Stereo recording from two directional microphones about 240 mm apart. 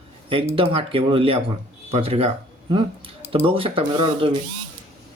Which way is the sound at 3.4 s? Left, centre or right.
Right.